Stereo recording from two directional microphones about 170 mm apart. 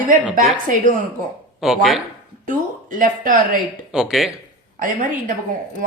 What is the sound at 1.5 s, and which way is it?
Speech, centre (ahead or behind).